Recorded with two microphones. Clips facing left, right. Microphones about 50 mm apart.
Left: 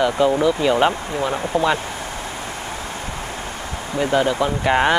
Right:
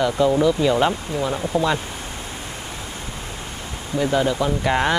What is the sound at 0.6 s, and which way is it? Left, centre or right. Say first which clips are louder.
Speech: left 2 dB; left.